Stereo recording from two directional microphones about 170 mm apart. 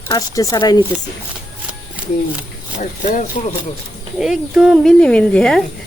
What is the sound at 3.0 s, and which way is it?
Speech, 50° left (ahead or behind).